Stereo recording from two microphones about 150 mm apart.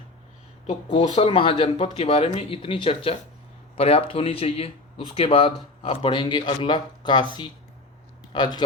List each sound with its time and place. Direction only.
0.7 s speech: 45° left (ahead or behind)